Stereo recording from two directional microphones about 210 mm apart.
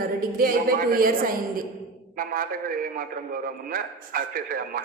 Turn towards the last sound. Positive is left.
turn(degrees=-45)  # may be behind; listen again after turning